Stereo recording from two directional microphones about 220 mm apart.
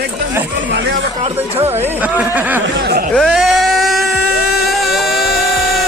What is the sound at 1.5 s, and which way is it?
Speech, 30° right (ahead or behind).